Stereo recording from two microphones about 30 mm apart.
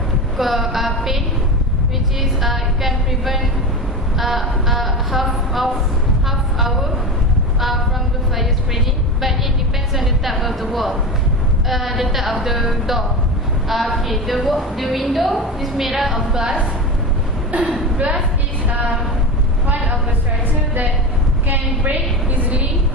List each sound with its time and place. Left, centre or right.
0.3 s a woman's voice: centre
2.4 s a woman's voice: centre
6.2 s a sound: centre
9.9 s a woman's voice: centre
17.5 s speech: right
21.4 s a woman's voice: right